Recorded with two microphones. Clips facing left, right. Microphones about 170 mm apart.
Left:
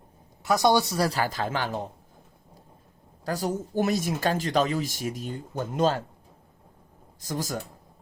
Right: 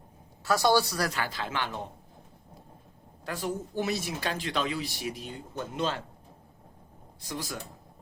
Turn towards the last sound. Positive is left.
turn(degrees=40)  # may be behind; listen again after turning